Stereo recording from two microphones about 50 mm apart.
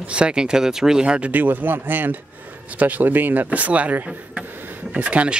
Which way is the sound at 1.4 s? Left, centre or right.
Right.